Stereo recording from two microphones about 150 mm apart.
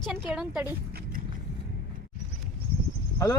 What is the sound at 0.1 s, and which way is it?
Speech, 5° right (ahead or behind).